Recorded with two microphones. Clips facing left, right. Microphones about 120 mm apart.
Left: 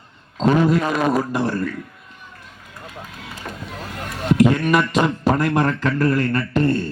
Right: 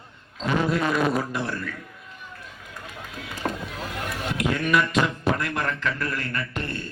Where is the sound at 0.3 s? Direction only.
45° left (ahead or behind).